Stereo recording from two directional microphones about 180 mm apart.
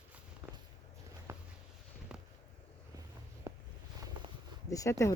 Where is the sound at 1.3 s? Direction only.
15° right (ahead or behind).